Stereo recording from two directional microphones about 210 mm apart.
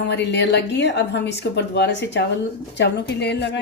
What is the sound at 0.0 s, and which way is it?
A woman's voice, 55° left (ahead or behind).